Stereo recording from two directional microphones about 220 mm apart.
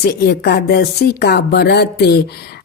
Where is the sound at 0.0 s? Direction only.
45° left (ahead or behind).